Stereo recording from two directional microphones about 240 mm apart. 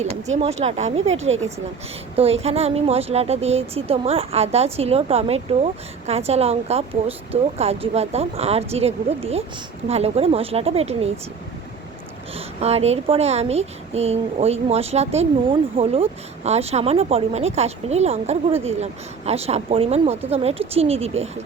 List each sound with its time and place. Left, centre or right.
0.0 s speech: right
12.5 s speech: right